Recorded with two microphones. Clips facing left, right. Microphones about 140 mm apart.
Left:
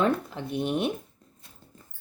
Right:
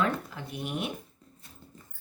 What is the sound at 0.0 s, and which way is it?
Speech, 30° left (ahead or behind).